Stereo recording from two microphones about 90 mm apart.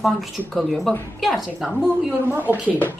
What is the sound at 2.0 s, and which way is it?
Speech, 15° right (ahead or behind).